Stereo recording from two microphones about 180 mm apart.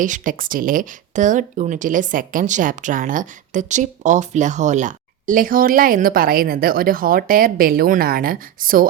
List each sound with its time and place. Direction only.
0.0 s speech: 45° right (ahead or behind)